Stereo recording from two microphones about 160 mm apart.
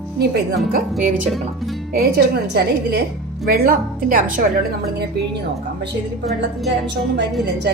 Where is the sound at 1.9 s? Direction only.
80° right; by 4.4 s 60° right (ahead or behind).